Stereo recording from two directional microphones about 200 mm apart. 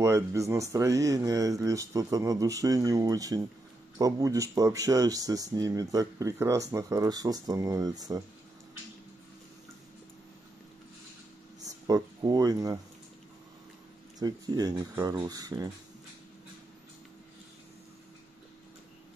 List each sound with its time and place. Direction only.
0.0 s speech: 15° right (ahead or behind)
11.6 s speech: 20° right (ahead or behind)
14.2 s speech: 20° right (ahead or behind)